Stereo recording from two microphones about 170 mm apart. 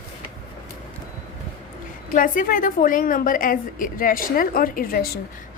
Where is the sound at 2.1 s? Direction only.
50° left (ahead or behind).